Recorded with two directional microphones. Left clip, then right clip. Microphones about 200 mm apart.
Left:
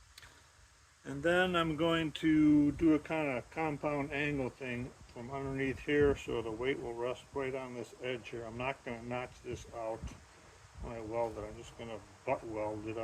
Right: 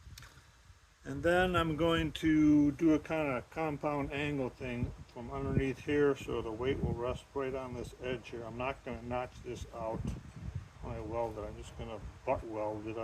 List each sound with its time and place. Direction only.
1.0 s speech: 15° right (ahead or behind)